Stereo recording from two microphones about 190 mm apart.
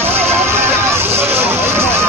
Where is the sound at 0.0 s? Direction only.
10° right (ahead or behind).